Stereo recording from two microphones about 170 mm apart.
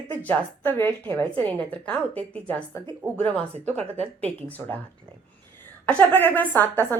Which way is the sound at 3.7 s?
35° right (ahead or behind).